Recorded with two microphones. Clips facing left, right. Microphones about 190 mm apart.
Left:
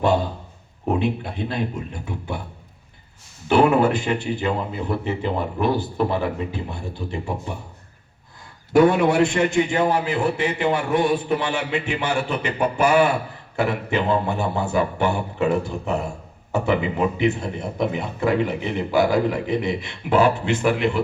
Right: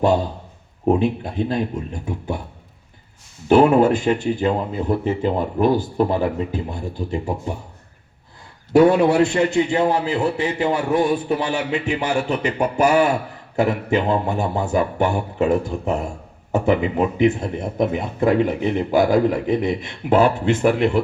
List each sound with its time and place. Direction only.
0.9 s speech: 40° right (ahead or behind)
3.5 s speech: 45° right (ahead or behind)
8.7 s a man's voice: 35° right (ahead or behind); by 21.0 s 50° right (ahead or behind)